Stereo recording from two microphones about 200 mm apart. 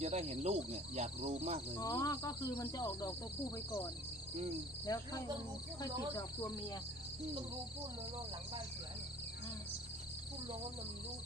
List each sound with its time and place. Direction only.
0.0 s speech: 35° right (ahead or behind)
1.8 s speech: 15° left (ahead or behind)
4.9 s speech: 20° left (ahead or behind)